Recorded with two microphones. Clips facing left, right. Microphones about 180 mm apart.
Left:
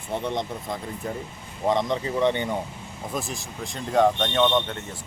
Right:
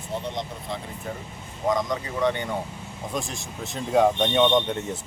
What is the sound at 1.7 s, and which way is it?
Speech, 25° left (ahead or behind).